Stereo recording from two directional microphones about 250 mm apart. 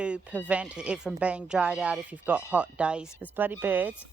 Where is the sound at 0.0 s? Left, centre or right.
Centre.